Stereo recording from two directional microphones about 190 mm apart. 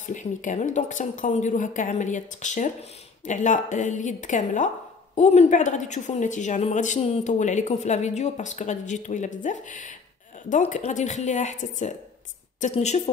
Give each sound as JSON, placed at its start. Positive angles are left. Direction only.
{"t": 0.0, "sound": "a woman's voice", "side_deg": 40}